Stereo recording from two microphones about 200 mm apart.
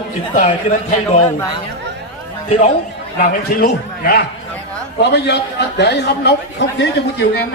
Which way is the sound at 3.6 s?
55° left (ahead or behind).